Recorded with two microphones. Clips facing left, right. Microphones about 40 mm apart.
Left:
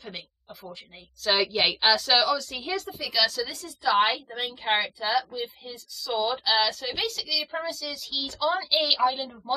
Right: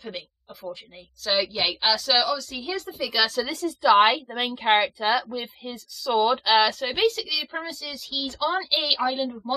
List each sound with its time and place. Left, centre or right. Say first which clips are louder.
0.0 s a sound: right 4 dB; centre
1.2 s a woman's voice: left 1 dB; centre
3.4 s a woman's voice: right 7 dB; right
4.4 s a woman's voice: right 5 dB; right
4.6 s a woman's voice: right 5 dB; right
7.1 s a woman's voice: right 4 dB; centre